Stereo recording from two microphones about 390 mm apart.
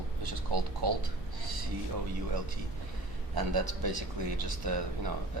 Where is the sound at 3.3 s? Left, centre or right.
Right.